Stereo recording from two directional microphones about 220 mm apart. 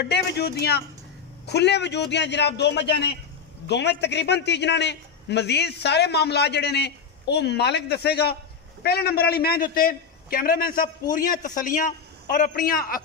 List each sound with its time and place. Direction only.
0.0 s a man's voice: 50° left (ahead or behind)